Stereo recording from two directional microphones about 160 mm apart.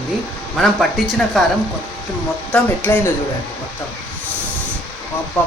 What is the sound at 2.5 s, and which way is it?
Speech, 10° left (ahead or behind).